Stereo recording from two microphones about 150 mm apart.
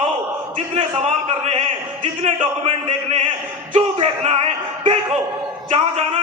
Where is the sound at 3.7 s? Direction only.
45° right (ahead or behind).